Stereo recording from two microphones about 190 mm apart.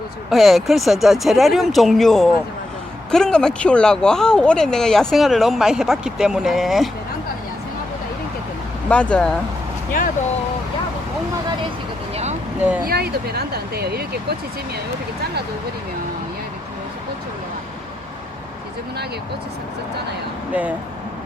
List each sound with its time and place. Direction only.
0.3 s speech: centre (ahead or behind)
8.9 s speech: 5° left (ahead or behind)
12.1 s vehicle: 35° right (ahead or behind)
12.8 s speech: 55° right (ahead or behind)
20.5 s speech: 5° right (ahead or behind)